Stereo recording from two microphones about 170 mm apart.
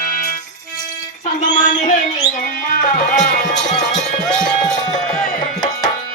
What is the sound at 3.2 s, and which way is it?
Speech, 60° left (ahead or behind).